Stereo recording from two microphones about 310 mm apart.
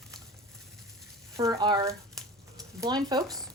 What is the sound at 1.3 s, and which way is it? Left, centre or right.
Speech, centre.